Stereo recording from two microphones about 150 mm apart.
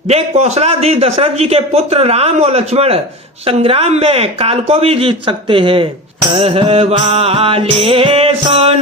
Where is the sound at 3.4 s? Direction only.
40° right (ahead or behind).